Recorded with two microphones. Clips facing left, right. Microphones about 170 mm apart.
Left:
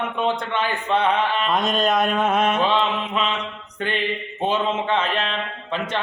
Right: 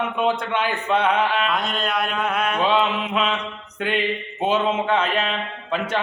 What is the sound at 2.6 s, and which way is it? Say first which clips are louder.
Speech: right 1 dB; 5° right (ahead or behind).